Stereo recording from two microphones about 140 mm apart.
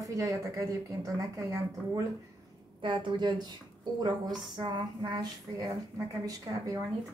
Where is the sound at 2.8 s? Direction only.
35° right (ahead or behind).